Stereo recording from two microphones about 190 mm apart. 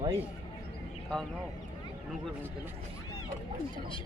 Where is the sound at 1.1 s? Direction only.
5° left (ahead or behind).